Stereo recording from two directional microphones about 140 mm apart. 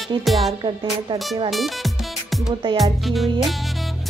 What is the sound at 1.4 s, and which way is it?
Music, centre (ahead or behind).